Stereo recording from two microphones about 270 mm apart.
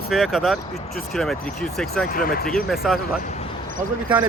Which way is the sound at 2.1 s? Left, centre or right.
Left.